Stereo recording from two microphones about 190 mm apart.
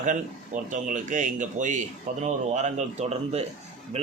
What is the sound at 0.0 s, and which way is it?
A man's voice, 40° right (ahead or behind).